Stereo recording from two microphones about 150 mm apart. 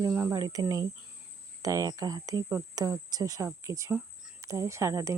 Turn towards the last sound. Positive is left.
turn(degrees=-20)  # may be behind; listen again after turning